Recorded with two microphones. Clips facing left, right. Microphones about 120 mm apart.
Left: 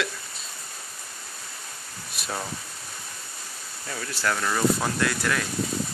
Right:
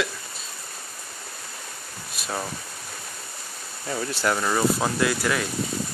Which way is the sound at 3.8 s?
25° right (ahead or behind).